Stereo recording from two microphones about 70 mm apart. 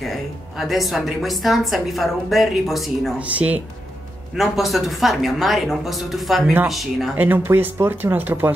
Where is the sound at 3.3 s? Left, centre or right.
Right.